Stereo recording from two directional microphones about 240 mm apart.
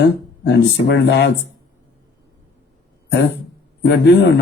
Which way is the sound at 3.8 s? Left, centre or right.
Left.